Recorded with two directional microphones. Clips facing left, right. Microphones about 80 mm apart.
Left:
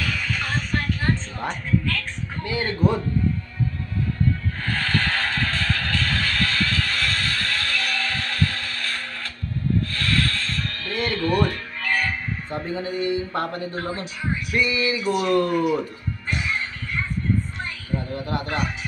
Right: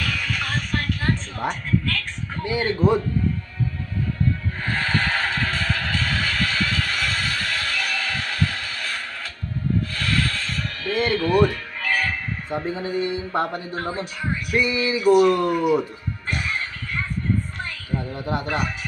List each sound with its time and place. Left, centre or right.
0.0 s a sound: centre
1.4 s a man's voice: centre
4.6 s music: centre
9.8 s snake: centre
11.1 s speech: centre
11.8 s music: centre
12.4 s a man's voice: centre
18.1 s a man's voice: right